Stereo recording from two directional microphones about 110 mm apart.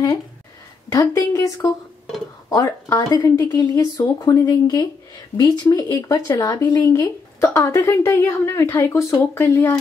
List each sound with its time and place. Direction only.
0.9 s speech: 30° left (ahead or behind)